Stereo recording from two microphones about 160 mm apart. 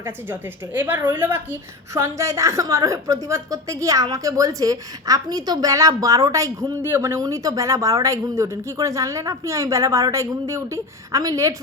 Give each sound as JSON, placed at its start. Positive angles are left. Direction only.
{"t": 0.0, "sound": "a woman's voice", "side_deg": -10}